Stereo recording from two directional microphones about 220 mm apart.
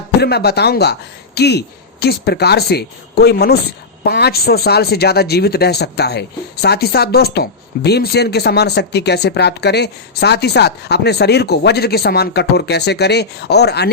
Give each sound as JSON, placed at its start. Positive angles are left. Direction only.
{"t": 0.2, "sound": "speech", "side_deg": 45}